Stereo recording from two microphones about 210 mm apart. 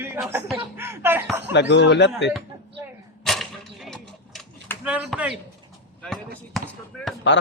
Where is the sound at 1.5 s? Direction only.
55° left (ahead or behind).